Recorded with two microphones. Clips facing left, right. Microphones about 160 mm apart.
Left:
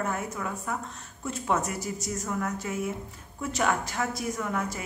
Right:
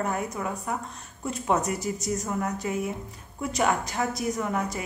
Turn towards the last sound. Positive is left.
turn(degrees=-20)  # may be behind; listen again after turning